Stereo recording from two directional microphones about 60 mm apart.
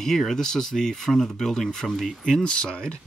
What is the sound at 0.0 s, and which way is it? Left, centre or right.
Speech, centre.